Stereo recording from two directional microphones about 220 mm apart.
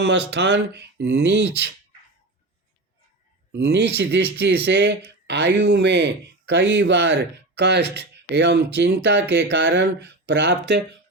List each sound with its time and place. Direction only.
0.0 s speech: 50° right (ahead or behind)
3.5 s speech: 50° right (ahead or behind)